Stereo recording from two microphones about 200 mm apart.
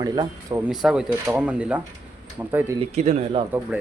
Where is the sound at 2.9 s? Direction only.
35° right (ahead or behind).